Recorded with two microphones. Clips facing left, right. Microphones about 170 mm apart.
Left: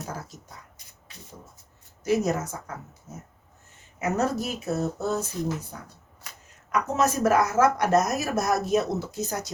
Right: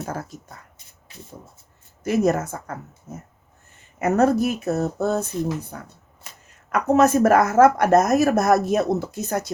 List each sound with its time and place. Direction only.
0.0 s speech: 55° right (ahead or behind)
2.0 s speech: 60° right (ahead or behind)
4.0 s speech: 60° right (ahead or behind)